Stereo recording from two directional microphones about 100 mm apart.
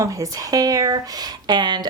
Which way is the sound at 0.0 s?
35° right (ahead or behind).